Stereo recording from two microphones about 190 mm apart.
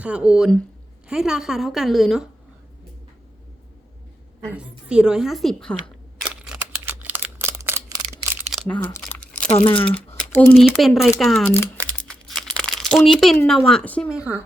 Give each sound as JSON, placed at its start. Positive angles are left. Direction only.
{"t": 0.0, "sound": "a woman's voice", "side_deg": -5}
{"t": 4.4, "sound": "a woman's voice", "side_deg": -10}
{"t": 6.2, "sound": "camera", "side_deg": -5}
{"t": 8.4, "sound": "crumpling", "side_deg": 0}
{"t": 8.6, "sound": "crumpling", "side_deg": 10}
{"t": 9.5, "sound": "speech", "side_deg": 25}
{"t": 10.2, "sound": "a sound", "side_deg": 10}
{"t": 10.6, "sound": "a woman's voice", "side_deg": 0}
{"t": 11.4, "sound": "speech", "side_deg": 15}
{"t": 12.0, "sound": "crumpling", "side_deg": 5}
{"t": 13.5, "sound": "a woman's voice", "side_deg": 0}
{"t": 14.1, "sound": "speech", "side_deg": -5}